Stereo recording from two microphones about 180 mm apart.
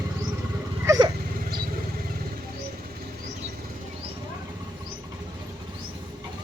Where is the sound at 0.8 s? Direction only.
20° right (ahead or behind).